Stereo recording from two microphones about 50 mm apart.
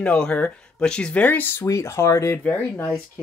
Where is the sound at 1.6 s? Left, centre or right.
Left.